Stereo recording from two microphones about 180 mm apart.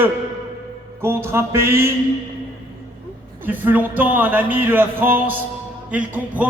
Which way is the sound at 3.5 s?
10° right (ahead or behind).